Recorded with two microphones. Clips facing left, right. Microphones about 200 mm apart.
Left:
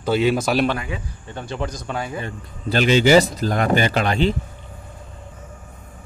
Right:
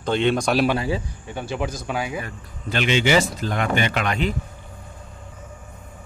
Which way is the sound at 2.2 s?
40° left (ahead or behind).